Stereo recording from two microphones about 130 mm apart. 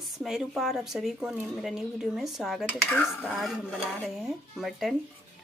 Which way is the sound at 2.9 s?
10° left (ahead or behind).